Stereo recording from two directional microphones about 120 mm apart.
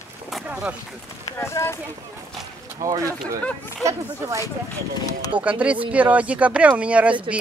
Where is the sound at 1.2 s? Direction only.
25° left (ahead or behind).